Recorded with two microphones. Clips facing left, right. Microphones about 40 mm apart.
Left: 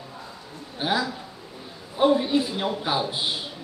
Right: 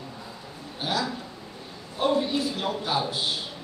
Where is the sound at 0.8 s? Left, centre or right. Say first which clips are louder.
Left 3 dB; centre.